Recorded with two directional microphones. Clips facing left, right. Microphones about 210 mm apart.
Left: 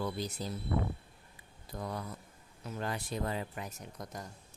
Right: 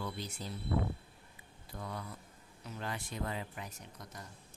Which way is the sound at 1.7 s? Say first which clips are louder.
Left 4 dB; 40° left (ahead or behind).